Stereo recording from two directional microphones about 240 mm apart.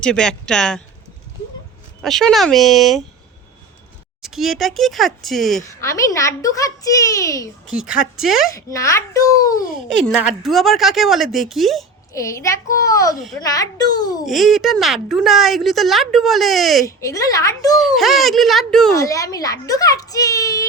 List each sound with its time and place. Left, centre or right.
0.0 s a woman's voice: centre
2.0 s a woman's voice: centre
4.2 s a woman's voice: centre
5.8 s a child's voice: centre
7.7 s a woman's voice: centre
8.5 s a child's voice: centre
10.1 s a woman's voice: centre
12.1 s a child's voice: centre
13.1 s a woman's voice: centre
13.4 s a child's voice: centre
14.3 s a woman's voice: centre
16.8 s a child's voice: centre
17.7 s a woman's voice: centre
18.9 s a child's voice: centre